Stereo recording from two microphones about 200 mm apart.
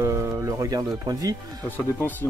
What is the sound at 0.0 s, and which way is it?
Music, 15° right (ahead or behind).